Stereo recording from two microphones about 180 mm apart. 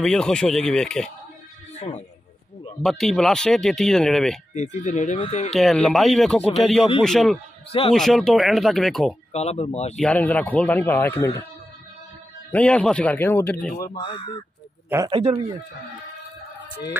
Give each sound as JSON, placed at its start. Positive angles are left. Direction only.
{"t": 0.0, "sound": "speech", "side_deg": 5}
{"t": 1.8, "sound": "a man's voice", "side_deg": 35}
{"t": 2.8, "sound": "speech", "side_deg": 0}
{"t": 4.6, "sound": "speech", "side_deg": 45}
{"t": 5.5, "sound": "speech", "side_deg": 0}
{"t": 9.3, "sound": "speech", "side_deg": 35}
{"t": 9.9, "sound": "speech", "side_deg": 5}
{"t": 12.4, "sound": "speech", "side_deg": 10}
{"t": 13.9, "sound": "speech", "side_deg": 25}
{"t": 15.0, "sound": "a man's voice", "side_deg": -35}